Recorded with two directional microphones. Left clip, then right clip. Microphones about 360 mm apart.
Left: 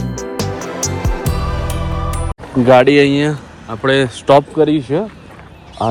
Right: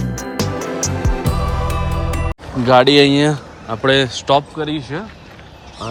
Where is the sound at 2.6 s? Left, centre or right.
Centre.